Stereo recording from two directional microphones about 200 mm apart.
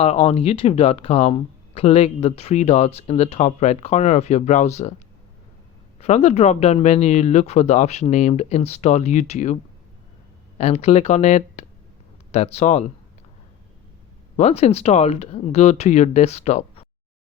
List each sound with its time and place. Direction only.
0.0 s speech: 30° left (ahead or behind)
6.0 s speech: 35° left (ahead or behind)
10.6 s speech: 30° left (ahead or behind)
14.3 s speech: 30° left (ahead or behind)